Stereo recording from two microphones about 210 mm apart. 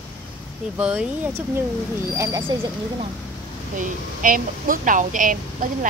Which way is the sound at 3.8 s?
40° right (ahead or behind).